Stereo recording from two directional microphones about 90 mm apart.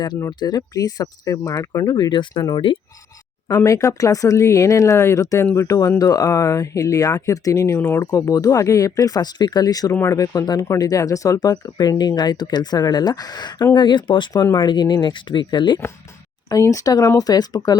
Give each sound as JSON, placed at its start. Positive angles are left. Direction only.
{"t": 0.3, "sound": "speech", "side_deg": 50}
{"t": 3.6, "sound": "speech", "side_deg": 35}
{"t": 16.5, "sound": "speech", "side_deg": 40}